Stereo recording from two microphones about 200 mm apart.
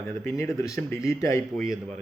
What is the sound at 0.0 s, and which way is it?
Speech, 15° left (ahead or behind).